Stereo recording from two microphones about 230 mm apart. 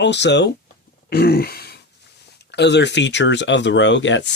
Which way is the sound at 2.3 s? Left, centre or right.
Left.